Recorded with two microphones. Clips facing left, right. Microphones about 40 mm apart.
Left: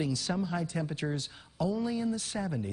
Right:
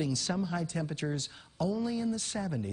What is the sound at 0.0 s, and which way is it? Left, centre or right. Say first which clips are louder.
Speech: even; centre.